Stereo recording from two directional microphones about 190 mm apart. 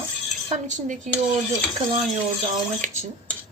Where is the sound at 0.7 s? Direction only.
40° right (ahead or behind).